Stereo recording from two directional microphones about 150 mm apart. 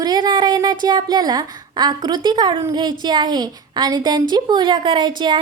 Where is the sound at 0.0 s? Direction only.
30° right (ahead or behind).